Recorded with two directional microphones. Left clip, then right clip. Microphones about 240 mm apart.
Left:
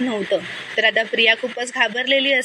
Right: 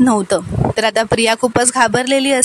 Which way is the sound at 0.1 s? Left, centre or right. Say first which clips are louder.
Right 6 dB; right.